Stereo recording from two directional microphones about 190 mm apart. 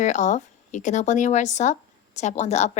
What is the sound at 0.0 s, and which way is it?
Speech, 40° left (ahead or behind).